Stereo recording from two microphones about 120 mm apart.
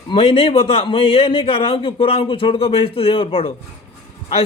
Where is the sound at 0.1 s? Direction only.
55° left (ahead or behind).